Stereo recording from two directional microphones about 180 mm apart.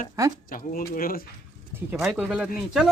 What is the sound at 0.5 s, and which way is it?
Speech, 50° left (ahead or behind).